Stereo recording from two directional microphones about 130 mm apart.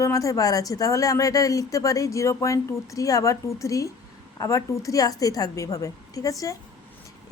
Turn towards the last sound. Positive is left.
turn(degrees=25)  # may be behind; listen again after turning